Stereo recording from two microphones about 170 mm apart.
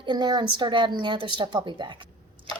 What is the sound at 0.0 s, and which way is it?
A woman's voice, 25° right (ahead or behind).